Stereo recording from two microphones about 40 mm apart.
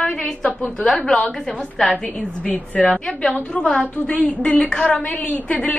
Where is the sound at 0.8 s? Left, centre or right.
Centre.